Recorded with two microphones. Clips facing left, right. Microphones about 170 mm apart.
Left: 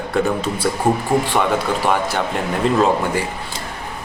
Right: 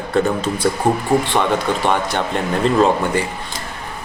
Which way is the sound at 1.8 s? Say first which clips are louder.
Even; 5° left (ahead or behind).